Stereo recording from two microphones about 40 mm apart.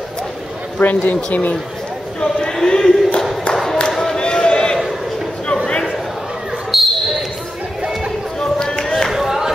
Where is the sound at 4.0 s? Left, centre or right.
Left.